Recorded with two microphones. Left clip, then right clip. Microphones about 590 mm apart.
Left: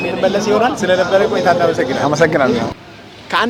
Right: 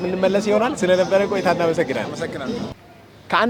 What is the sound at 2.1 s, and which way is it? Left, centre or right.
Speech, left.